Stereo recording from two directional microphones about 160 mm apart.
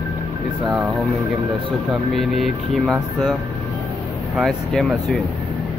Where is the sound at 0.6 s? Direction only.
Centre (ahead or behind).